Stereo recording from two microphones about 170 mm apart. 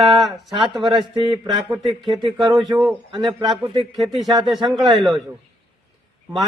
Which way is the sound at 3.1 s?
25° right (ahead or behind).